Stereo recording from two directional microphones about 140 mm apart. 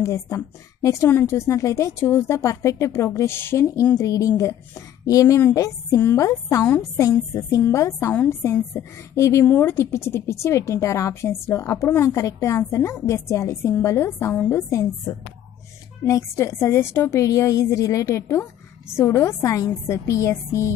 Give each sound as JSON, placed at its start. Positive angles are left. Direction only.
{"t": 0.0, "sound": "a woman's voice", "side_deg": 20}
{"t": 16.0, "sound": "a woman's voice", "side_deg": 20}